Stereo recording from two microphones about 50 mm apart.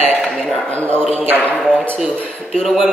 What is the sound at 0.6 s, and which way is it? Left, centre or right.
Speech, left.